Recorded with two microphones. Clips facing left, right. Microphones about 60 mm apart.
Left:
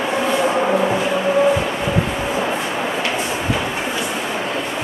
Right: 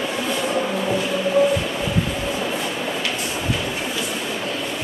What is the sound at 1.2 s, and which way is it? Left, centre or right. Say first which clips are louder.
Vehicle: left 1 dB; left.